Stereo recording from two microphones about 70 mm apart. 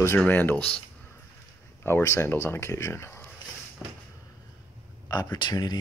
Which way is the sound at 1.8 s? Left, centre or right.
Left.